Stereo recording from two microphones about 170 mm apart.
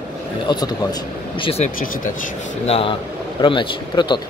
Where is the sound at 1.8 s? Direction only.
50° left (ahead or behind).